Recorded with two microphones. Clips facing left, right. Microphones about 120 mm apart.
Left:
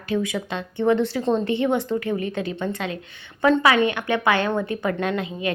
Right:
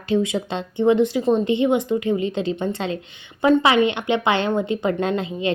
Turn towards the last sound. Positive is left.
turn(degrees=-25)  # may be behind; listen again after turning